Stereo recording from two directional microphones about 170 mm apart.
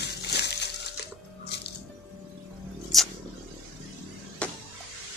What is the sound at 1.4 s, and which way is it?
Music, 75° left (ahead or behind).